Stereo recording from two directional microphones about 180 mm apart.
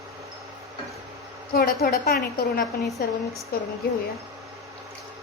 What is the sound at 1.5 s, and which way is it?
A woman's voice, 55° left (ahead or behind).